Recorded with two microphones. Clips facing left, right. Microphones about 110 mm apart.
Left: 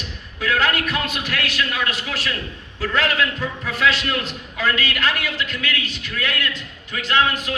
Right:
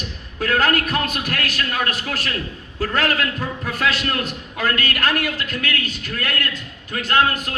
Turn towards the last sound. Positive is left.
turn(degrees=-45)  # may be behind; listen again after turning